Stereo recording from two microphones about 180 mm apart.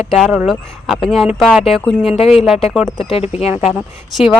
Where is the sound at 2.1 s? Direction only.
35° left (ahead or behind).